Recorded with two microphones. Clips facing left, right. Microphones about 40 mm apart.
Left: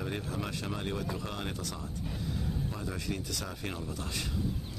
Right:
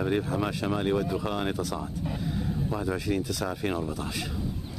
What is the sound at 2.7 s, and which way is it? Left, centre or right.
Speech, centre.